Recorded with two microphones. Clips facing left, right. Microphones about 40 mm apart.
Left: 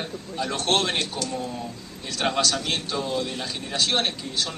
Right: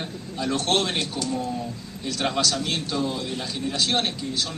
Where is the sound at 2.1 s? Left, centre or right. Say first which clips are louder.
Left 1 dB; centre.